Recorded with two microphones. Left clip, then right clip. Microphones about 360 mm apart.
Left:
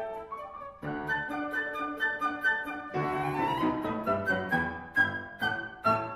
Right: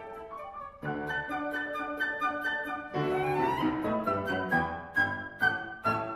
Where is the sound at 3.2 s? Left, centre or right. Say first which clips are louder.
Right 2 dB; centre.